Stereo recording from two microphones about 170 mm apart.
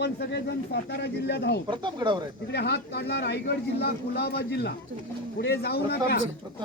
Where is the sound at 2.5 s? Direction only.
75° left (ahead or behind).